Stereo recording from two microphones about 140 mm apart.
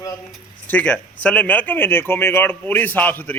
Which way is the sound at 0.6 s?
10° left (ahead or behind).